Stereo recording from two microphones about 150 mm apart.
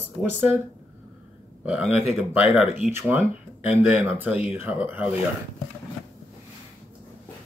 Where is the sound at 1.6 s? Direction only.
10° right (ahead or behind).